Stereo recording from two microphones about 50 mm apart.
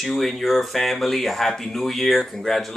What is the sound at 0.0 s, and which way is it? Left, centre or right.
Speech, centre.